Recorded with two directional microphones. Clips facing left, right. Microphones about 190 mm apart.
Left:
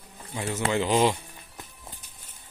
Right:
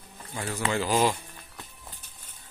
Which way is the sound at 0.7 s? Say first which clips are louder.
Left 2 dB; 20° left (ahead or behind).